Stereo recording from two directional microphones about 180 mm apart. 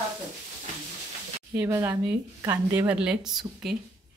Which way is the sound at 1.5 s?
15° right (ahead or behind).